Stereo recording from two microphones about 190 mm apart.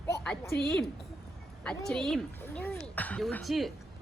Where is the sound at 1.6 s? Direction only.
5° left (ahead or behind).